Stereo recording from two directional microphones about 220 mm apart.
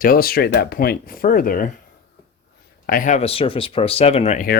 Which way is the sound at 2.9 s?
35° left (ahead or behind).